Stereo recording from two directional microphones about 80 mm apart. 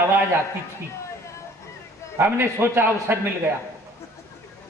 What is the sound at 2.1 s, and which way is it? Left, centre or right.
A man's voice, right.